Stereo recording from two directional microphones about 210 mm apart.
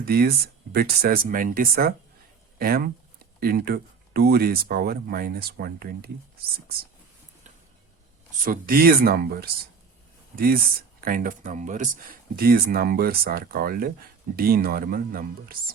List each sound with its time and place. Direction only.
0.0 s speech: 45° right (ahead or behind)
8.4 s speech: 40° right (ahead or behind)